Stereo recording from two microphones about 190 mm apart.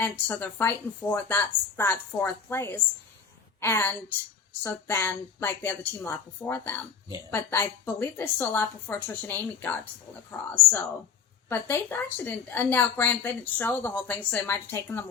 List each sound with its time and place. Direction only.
0.0 s a woman's voice: 10° left (ahead or behind)